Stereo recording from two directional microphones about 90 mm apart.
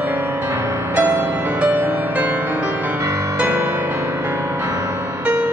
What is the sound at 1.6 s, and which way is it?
Music, 20° right (ahead or behind).